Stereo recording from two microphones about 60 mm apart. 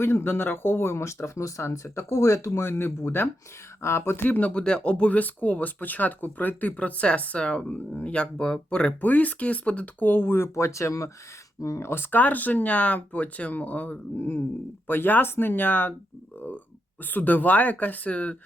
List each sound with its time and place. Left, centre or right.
0.0 s speech: left
4.4 s speech: left
12.1 s speech: left
17.1 s speech: left